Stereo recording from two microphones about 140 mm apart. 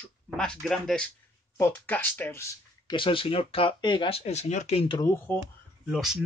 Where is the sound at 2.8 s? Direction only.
35° left (ahead or behind).